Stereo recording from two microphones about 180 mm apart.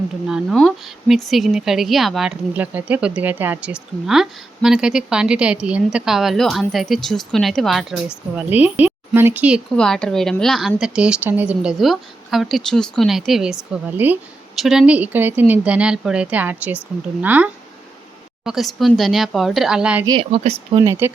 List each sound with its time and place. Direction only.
0.3 s speech: centre (ahead or behind)
9.7 s speech: 5° left (ahead or behind)
20.1 s speech: 30° right (ahead or behind)
20.8 s speech: 15° right (ahead or behind)